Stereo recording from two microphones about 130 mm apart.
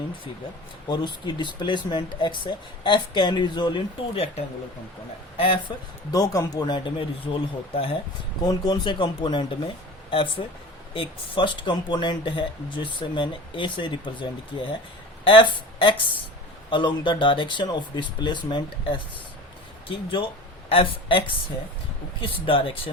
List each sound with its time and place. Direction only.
0.9 s speech: 35° left (ahead or behind)
5.4 s speech: 45° left (ahead or behind)
6.1 s speech: 25° left (ahead or behind); by 7.9 s 45° left (ahead or behind)
8.4 s speech: 30° left (ahead or behind)